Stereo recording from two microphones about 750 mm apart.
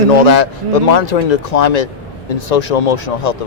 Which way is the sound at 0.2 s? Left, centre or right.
Left.